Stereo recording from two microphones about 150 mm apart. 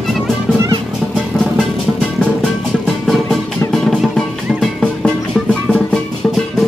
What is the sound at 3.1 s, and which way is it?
Music, centre (ahead or behind).